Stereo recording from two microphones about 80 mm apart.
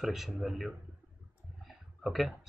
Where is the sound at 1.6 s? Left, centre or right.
Centre.